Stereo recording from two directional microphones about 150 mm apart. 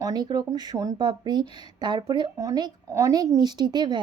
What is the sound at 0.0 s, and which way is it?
Speech, 25° right (ahead or behind).